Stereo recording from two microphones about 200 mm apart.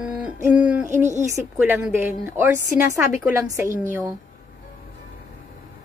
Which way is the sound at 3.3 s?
15° right (ahead or behind).